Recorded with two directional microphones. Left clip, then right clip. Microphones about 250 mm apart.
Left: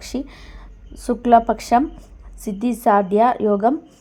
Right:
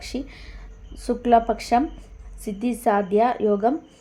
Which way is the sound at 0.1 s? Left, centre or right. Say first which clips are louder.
Left 7 dB; centre.